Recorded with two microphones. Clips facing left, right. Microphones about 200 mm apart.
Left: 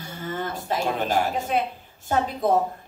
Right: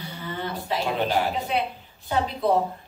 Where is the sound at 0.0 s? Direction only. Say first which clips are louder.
Left 2 dB; 45° left (ahead or behind).